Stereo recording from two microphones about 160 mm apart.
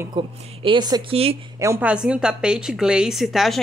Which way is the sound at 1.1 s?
40° right (ahead or behind).